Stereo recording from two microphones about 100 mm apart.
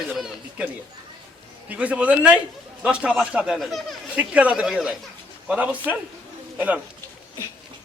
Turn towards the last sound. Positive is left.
turn(degrees=-15)  # may be behind; listen again after turning